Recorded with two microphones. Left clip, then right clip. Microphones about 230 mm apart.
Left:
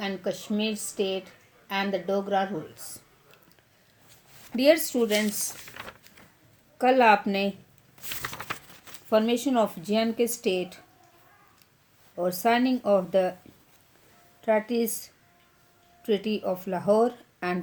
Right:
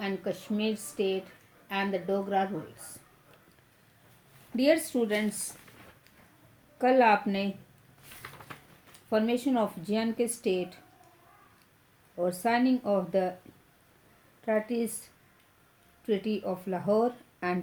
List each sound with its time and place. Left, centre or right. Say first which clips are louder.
0.0 s speech: left 3 dB; left
4.5 s speech: left 4 dB; left
6.7 s speech: left 3 dB; left
12.1 s speech: left 4 dB; left
14.4 s speech: left 5 dB; left
16.0 s speech: left 4 dB; left